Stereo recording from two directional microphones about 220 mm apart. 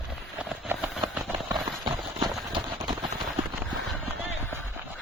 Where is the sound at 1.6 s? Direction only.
20° right (ahead or behind).